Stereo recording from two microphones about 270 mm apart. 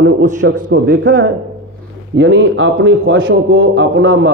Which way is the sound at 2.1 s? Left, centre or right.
Right.